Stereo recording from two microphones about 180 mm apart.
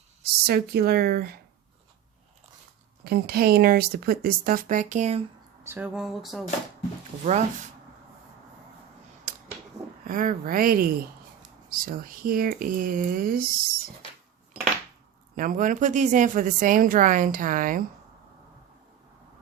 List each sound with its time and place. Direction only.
0.2 s speech: 60° right (ahead or behind)
3.0 s speech: 55° right (ahead or behind); by 5.2 s 40° right (ahead or behind)
5.6 s a sound: 10° right (ahead or behind)
7.3 s speech: 40° right (ahead or behind)
9.3 s a sound: 45° right (ahead or behind)
10.0 s speech: 50° right (ahead or behind)
15.4 s speech: 50° right (ahead or behind)